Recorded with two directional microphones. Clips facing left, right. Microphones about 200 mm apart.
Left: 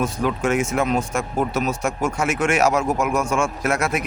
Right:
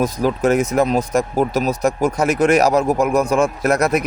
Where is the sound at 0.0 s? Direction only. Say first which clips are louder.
Right 4 dB; 35° right (ahead or behind).